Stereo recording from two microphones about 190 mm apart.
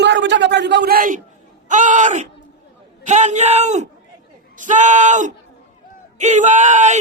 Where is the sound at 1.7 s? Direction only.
40° right (ahead or behind).